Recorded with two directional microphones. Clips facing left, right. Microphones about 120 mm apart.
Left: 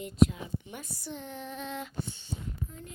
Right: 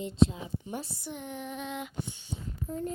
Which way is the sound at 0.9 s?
15° right (ahead or behind).